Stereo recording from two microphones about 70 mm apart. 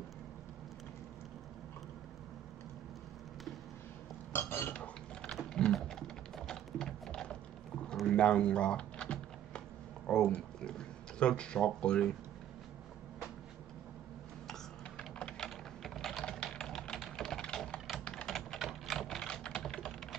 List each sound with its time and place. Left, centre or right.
4.3 s cutlery: left
4.7 s mechanisms: centre
5.3 s typing: centre
10.0 s speech: centre
14.5 s typing: centre
19.0 s typing: centre